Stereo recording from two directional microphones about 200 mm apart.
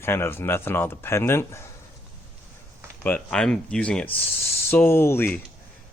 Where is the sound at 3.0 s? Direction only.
5° left (ahead or behind).